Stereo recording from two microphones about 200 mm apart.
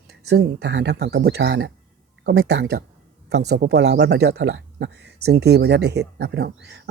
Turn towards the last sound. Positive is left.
turn(degrees=-55)  # may be behind; listen again after turning